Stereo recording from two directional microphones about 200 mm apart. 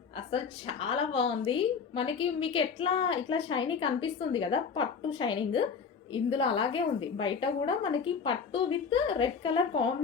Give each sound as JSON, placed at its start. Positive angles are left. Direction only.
{"t": 0.3, "sound": "a woman's voice", "side_deg": 25}